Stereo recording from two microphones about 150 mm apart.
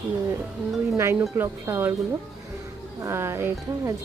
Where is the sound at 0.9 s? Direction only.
20° right (ahead or behind).